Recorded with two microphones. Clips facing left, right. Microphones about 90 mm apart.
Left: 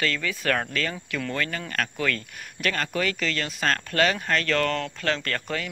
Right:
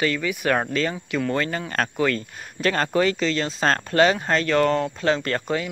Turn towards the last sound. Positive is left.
turn(degrees=-20)  # may be behind; listen again after turning